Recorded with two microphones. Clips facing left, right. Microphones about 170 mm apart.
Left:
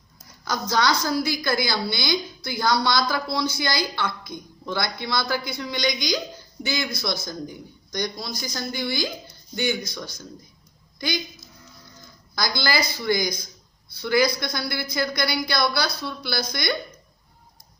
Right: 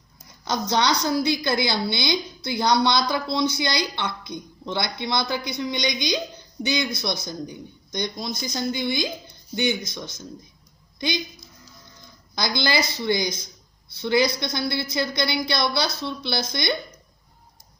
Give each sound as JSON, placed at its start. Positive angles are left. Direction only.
{"t": 0.4, "sound": "a woman's voice", "side_deg": -25}
{"t": 12.3, "sound": "a woman's voice", "side_deg": -20}